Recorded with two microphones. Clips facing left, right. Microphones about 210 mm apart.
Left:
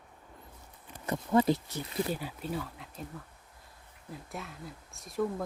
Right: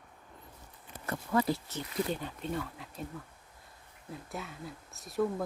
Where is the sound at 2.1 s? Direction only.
5° left (ahead or behind).